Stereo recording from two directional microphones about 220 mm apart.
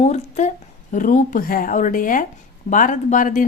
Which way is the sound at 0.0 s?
30° left (ahead or behind).